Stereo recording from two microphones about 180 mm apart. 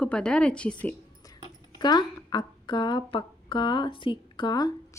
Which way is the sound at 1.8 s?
25° left (ahead or behind).